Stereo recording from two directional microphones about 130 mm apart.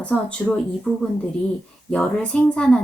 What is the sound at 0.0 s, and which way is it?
Speech, 10° left (ahead or behind).